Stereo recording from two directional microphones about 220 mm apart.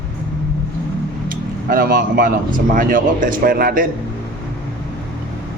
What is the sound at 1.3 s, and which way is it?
Speech, 40° right (ahead or behind).